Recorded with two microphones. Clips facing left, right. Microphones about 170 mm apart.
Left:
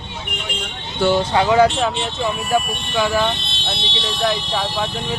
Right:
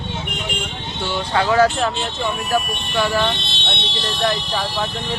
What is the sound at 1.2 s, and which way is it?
Speech, 20° left (ahead or behind).